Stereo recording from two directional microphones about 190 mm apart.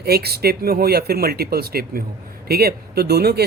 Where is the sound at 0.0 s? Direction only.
55° right (ahead or behind).